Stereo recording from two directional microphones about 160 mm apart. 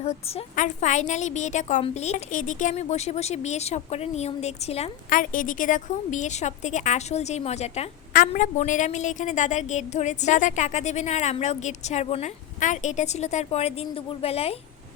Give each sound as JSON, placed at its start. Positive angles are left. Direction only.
{"t": 0.0, "sound": "a woman's voice", "side_deg": 50}
{"t": 5.0, "sound": "a woman's voice", "side_deg": 55}